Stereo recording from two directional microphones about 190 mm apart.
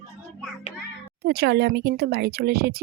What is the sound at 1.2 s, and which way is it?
Speech, 55° right (ahead or behind).